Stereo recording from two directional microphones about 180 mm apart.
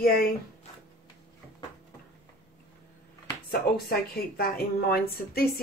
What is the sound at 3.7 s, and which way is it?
Speech, 60° left (ahead or behind).